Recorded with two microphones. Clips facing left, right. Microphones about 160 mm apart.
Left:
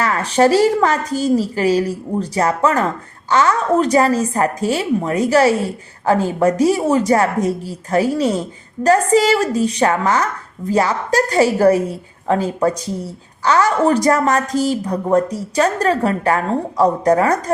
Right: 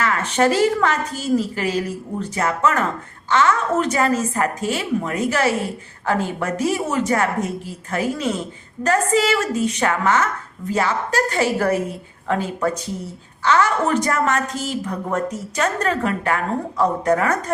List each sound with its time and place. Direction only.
0.0 s a woman's voice: 35° left (ahead or behind)